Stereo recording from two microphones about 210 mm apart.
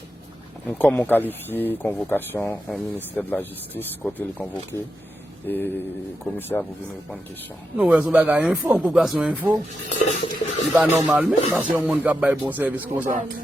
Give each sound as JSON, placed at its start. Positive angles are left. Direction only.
{"t": 0.7, "sound": "speech", "side_deg": 5}
{"t": 7.8, "sound": "speech", "side_deg": -5}
{"t": 10.1, "sound": "stir", "side_deg": 35}
{"t": 10.8, "sound": "speech", "side_deg": 0}